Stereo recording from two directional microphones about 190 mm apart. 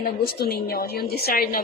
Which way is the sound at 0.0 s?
55° left (ahead or behind).